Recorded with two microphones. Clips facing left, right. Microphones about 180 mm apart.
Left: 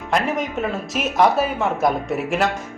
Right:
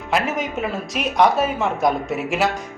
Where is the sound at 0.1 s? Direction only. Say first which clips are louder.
Left 1 dB; centre (ahead or behind).